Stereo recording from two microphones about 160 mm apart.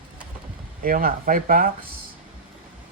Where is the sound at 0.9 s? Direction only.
65° right (ahead or behind).